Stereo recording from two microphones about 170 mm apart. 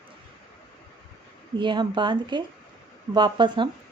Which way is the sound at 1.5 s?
25° right (ahead or behind).